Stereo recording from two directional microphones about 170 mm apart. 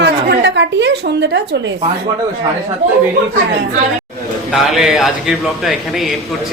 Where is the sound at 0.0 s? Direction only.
85° right.